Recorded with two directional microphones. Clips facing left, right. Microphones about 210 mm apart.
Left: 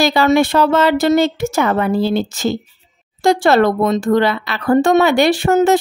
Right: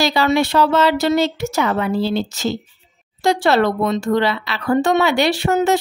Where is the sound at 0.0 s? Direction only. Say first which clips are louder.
Left 4 dB; 50° left (ahead or behind).